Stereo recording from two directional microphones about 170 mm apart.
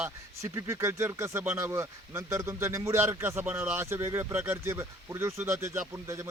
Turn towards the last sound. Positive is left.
turn(degrees=-15)  # may be behind; listen again after turning